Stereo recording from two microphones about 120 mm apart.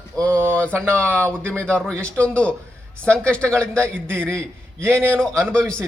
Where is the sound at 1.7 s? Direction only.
10° left (ahead or behind).